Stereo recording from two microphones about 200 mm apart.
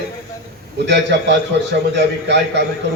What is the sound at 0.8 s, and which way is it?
A man's voice, 60° right (ahead or behind).